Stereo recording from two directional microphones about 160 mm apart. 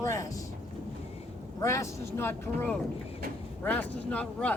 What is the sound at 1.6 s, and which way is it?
Speech, 20° left (ahead or behind).